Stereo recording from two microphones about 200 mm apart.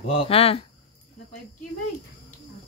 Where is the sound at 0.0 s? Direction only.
30° left (ahead or behind).